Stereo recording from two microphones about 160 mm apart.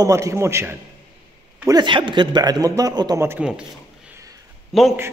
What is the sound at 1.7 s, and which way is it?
A man's voice, 30° right (ahead or behind).